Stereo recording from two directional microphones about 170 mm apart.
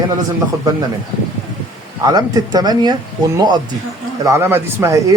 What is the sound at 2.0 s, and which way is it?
Speech, 20° right (ahead or behind).